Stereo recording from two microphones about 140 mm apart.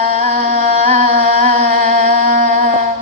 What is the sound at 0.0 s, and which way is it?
Music, 55° right (ahead or behind).